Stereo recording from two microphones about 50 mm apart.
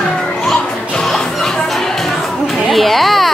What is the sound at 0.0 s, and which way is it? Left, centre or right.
Children playing, centre.